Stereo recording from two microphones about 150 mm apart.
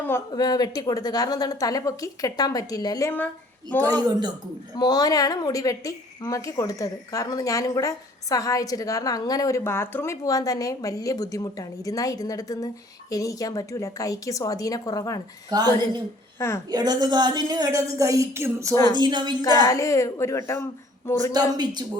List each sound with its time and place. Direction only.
0.3 s a woman's voice: 25° left (ahead or behind)
3.8 s a woman's voice: 25° right (ahead or behind)
4.8 s a woman's voice: 25° left (ahead or behind)
15.4 s a woman's voice: 25° right (ahead or behind)
18.9 s a woman's voice: 30° right (ahead or behind)
19.4 s a woman's voice: 20° left (ahead or behind)
21.5 s a woman's voice: 30° right (ahead or behind)